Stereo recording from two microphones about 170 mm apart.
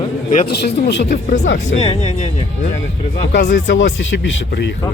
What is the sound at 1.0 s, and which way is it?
Speech, 45° left (ahead or behind).